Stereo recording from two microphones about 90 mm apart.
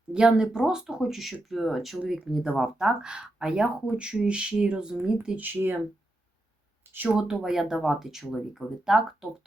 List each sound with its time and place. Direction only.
0.1 s speech: 10° right (ahead or behind)
5.4 s speech: 20° right (ahead or behind)
6.9 s speech: 20° right (ahead or behind)
7.2 s speech: 5° right (ahead or behind)